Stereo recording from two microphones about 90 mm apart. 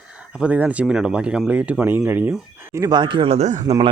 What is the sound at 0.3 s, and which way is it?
Speech, 15° right (ahead or behind).